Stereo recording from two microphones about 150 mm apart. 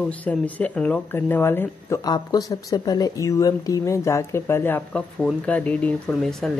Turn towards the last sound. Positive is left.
turn(degrees=0)  # may be behind; listen again after turning